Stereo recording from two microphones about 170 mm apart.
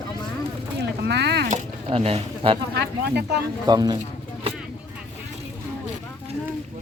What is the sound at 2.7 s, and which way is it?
Speech, 85° right.